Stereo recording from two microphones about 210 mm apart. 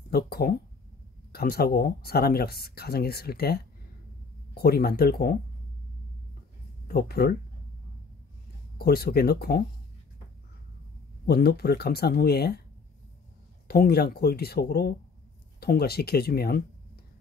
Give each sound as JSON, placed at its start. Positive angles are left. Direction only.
{"t": 0.1, "sound": "speech", "side_deg": 45}
{"t": 6.9, "sound": "speech", "side_deg": 45}
{"t": 8.7, "sound": "speech", "side_deg": 45}
{"t": 11.2, "sound": "speech", "side_deg": 50}
{"t": 13.7, "sound": "speech", "side_deg": 50}